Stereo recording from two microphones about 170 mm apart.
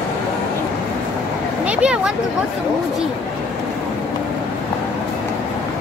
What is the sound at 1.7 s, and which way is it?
Speech, 5° right (ahead or behind).